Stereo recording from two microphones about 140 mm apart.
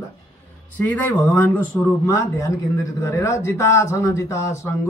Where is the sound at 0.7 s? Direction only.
10° left (ahead or behind).